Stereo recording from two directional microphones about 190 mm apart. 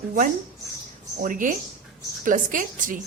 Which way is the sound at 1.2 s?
45° right (ahead or behind).